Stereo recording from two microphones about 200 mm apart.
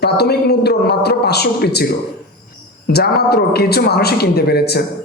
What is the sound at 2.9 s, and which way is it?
Speech, 50° left (ahead or behind).